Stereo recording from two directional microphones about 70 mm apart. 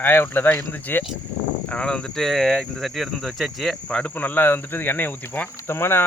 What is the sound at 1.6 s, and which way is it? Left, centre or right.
Speech, centre.